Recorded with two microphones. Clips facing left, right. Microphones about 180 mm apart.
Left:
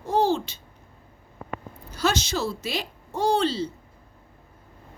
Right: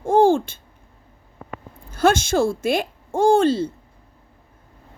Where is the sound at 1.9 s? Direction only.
50° right (ahead or behind).